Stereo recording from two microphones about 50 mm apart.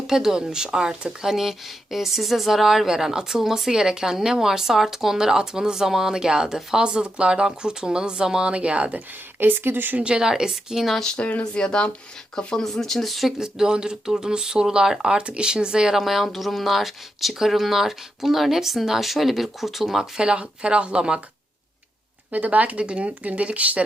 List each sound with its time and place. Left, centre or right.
0.1 s a woman's voice: centre
9.4 s speech: right
10.0 s a woman's voice: centre
11.0 s speech: centre
11.3 s speech: left
11.6 s speech: centre
12.6 s speech: centre
13.4 s a woman's voice: centre
20.1 s speech: centre
22.3 s speech: right